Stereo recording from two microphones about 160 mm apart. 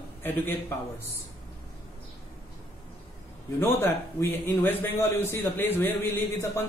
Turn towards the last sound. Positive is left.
turn(degrees=15)  # may be behind; listen again after turning